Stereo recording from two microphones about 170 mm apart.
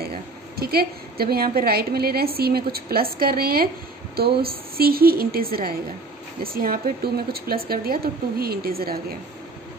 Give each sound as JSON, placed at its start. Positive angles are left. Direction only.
{"t": 0.1, "sound": "a woman's voice", "side_deg": -65}